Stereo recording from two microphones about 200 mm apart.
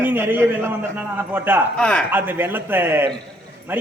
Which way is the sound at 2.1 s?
10° right (ahead or behind).